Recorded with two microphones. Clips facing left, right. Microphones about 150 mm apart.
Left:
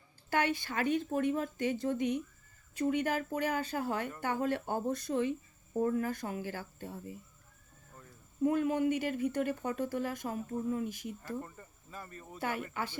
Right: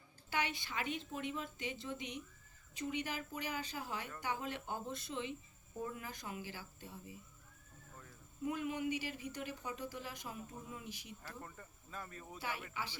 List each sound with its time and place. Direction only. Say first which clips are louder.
0.3 s speech: left 8 dB; 50° left (ahead or behind)
8.4 s speech: left 9 dB; 50° left (ahead or behind)
11.4 s speech: left 3 dB; 5° left (ahead or behind)
12.4 s speech: left 8 dB; 50° left (ahead or behind)